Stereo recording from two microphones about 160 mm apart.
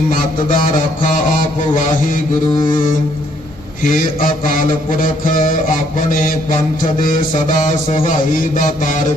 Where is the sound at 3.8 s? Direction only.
60° left (ahead or behind).